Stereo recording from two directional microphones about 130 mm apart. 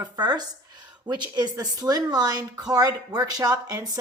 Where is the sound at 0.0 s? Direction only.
30° right (ahead or behind).